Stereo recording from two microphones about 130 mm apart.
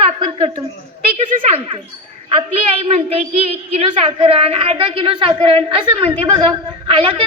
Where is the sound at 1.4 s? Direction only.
50° right (ahead or behind).